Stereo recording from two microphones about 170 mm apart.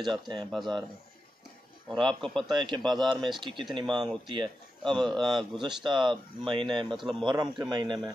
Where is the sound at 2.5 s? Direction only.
25° right (ahead or behind).